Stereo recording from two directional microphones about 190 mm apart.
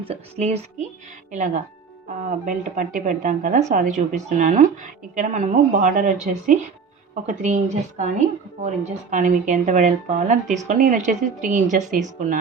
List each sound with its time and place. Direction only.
0.0 s a woman's voice: 35° right (ahead or behind)